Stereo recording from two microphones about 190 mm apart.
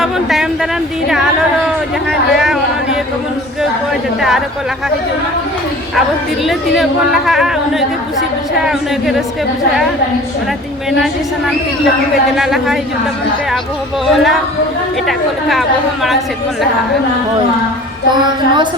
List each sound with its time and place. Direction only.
0.0 s speech: centre (ahead or behind)
4.2 s speech: centre (ahead or behind)
6.4 s speech: centre (ahead or behind)
12.4 s speech: centre (ahead or behind)
14.1 s speech: centre (ahead or behind)
18.1 s a woman's voice: 25° right (ahead or behind)